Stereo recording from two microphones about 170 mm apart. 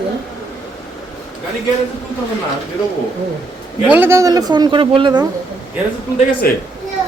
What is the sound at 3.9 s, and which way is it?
A woman's voice, 15° right (ahead or behind).